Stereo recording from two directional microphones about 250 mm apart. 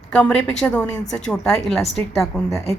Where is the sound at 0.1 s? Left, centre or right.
Centre.